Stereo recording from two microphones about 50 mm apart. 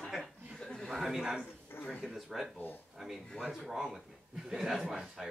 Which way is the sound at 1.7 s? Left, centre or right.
Left.